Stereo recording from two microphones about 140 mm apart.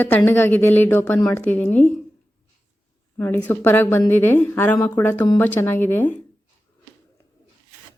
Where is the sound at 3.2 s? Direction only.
15° left (ahead or behind).